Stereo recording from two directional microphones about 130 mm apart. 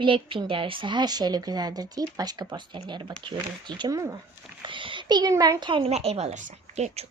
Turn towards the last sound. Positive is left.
turn(degrees=-65)  # may be behind; listen again after turning